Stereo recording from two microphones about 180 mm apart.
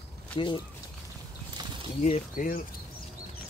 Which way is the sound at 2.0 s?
45° left (ahead or behind).